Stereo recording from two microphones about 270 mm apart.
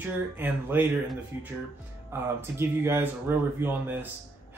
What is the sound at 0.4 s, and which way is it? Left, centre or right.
Speech, centre.